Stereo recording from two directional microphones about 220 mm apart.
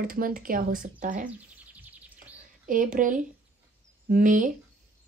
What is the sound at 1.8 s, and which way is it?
Bird, 5° right (ahead or behind).